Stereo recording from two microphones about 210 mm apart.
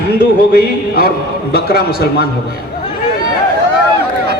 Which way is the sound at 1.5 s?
45° left (ahead or behind).